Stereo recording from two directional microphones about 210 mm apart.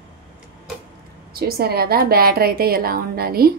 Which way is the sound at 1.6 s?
45° right (ahead or behind).